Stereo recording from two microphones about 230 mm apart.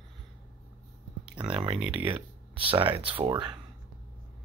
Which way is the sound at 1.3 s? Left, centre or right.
Right.